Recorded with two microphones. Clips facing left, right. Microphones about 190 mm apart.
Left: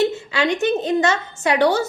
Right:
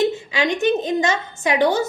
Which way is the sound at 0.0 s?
15° right (ahead or behind).